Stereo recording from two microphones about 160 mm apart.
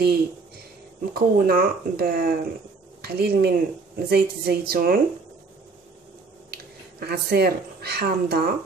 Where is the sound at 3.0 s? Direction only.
80° right.